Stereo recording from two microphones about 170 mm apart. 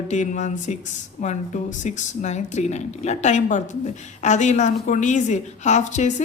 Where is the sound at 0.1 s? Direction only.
45° left (ahead or behind).